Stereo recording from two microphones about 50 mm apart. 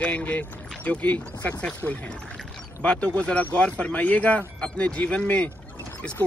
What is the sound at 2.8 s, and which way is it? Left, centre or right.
Speech, left.